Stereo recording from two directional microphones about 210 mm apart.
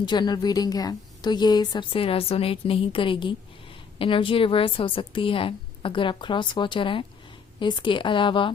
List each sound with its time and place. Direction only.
0.0 s a woman's voice: 20° left (ahead or behind)